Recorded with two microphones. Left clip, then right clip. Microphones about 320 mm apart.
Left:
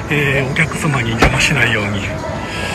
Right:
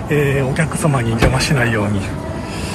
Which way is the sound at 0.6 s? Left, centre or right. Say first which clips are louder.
Left 2 dB; centre.